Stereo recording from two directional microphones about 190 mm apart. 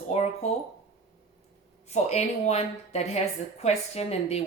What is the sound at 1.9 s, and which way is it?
A woman's voice, 35° left (ahead or behind).